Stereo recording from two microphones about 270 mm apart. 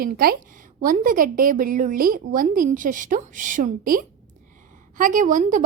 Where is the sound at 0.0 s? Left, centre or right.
Right.